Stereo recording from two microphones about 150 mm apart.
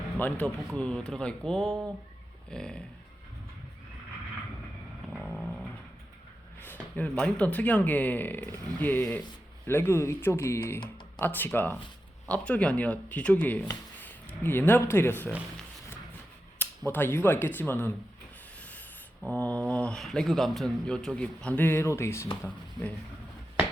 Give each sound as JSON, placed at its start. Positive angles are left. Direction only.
{"t": 0.2, "sound": "speech", "side_deg": 10}
{"t": 5.0, "sound": "vehicle", "side_deg": 0}
{"t": 6.7, "sound": "speech", "side_deg": 10}
{"t": 16.6, "sound": "speech", "side_deg": 15}
{"t": 18.6, "sound": "a sound", "side_deg": 10}
{"t": 19.3, "sound": "speech", "side_deg": 10}